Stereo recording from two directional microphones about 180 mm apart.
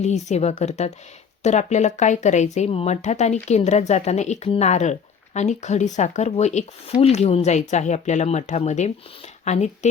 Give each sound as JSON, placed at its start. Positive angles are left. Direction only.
{"t": 0.0, "sound": "speech", "side_deg": 40}